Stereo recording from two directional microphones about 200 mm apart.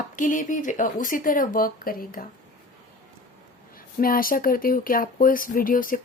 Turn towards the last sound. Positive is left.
turn(degrees=45)  # may be behind; listen again after turning